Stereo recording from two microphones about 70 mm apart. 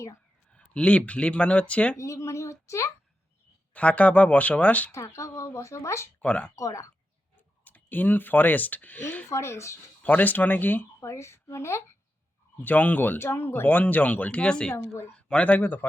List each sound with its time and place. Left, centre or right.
0.5 s speech: centre
2.0 s a child's voice: left
3.8 s speech: centre
4.9 s speech: left
6.2 s speech: left
6.6 s speech: left
7.6 s speech: left
9.3 s speech: left
10.0 s speech: left
11.0 s a woman's voice: left
12.5 s speech: left